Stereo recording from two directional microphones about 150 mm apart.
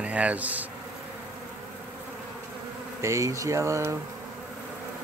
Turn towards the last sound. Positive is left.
turn(degrees=-20)  # may be behind; listen again after turning